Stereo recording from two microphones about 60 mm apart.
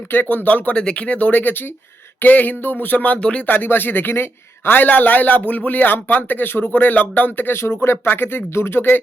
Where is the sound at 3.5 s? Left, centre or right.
Left.